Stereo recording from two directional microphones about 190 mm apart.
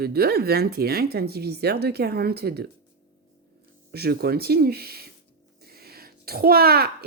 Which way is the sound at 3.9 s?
55° right (ahead or behind).